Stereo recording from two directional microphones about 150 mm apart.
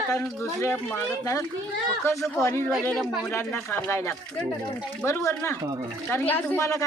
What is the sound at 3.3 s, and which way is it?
A man's voice, 15° left (ahead or behind).